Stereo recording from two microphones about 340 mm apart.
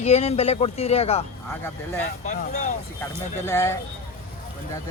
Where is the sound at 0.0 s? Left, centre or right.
Centre.